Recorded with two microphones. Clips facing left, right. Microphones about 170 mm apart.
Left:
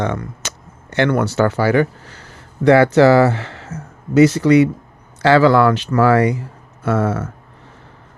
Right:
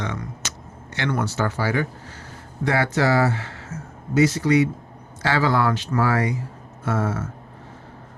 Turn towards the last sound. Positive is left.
turn(degrees=70)  # may be behind; listen again after turning